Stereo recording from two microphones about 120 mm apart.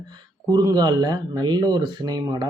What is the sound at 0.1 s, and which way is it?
Speech, 35° right (ahead or behind).